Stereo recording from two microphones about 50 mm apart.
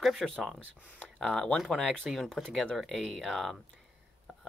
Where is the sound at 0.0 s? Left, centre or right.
Centre.